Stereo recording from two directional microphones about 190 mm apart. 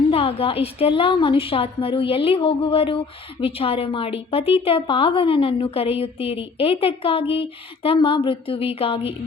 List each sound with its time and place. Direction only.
0.1 s a woman's voice: 30° left (ahead or behind)